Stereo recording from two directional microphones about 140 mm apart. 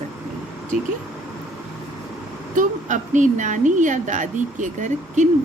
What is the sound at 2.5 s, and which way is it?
Speech, 65° right (ahead or behind).